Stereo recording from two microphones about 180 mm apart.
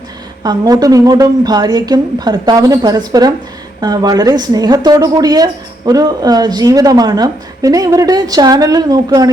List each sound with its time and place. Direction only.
0.4 s a woman's voice: 20° right (ahead or behind)